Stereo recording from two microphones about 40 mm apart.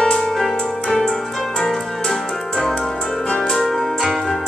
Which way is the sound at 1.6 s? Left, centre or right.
Centre.